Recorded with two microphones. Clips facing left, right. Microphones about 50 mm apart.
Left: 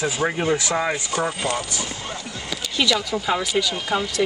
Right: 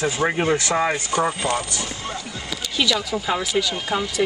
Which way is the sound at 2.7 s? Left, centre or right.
Centre.